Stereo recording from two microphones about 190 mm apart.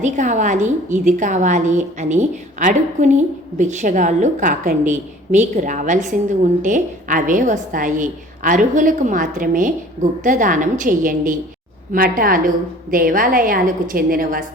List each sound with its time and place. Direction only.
0.0 s a woman's voice: 40° right (ahead or behind)